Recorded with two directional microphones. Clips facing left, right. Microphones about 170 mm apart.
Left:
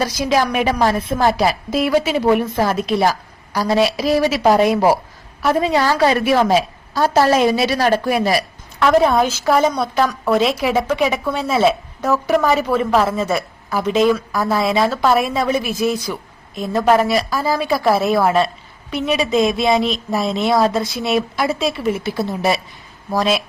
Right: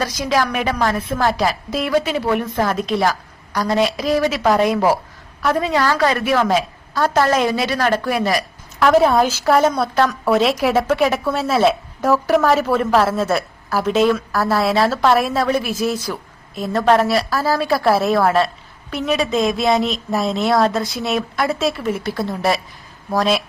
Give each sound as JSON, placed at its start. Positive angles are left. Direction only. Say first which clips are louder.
{"t": 0.0, "sound": "a woman's voice", "louder": "left 2 dB", "side_deg": 15}
{"t": 5.5, "sound": "a woman's voice", "louder": "left 2 dB", "side_deg": 25}
{"t": 8.8, "sound": "a woman's voice", "louder": "even", "side_deg": -5}